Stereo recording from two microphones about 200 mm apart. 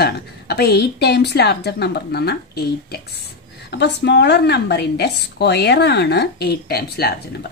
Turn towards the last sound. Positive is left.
turn(degrees=50)  # may be behind; listen again after turning